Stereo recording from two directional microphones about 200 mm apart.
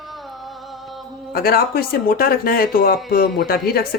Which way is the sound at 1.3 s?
50° left (ahead or behind).